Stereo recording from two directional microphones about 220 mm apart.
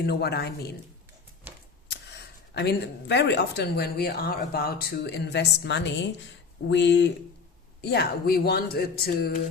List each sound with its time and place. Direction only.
0.0 s speech: 45° left (ahead or behind)
1.5 s a sound: 10° right (ahead or behind)
2.5 s speech: 50° left (ahead or behind)